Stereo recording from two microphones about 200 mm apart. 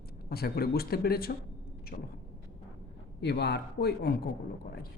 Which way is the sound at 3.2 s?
55° left (ahead or behind).